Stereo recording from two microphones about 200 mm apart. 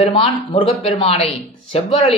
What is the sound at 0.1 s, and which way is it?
A man's voice, 30° left (ahead or behind).